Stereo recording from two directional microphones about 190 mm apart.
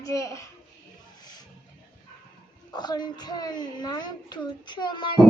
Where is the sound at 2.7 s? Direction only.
20° left (ahead or behind).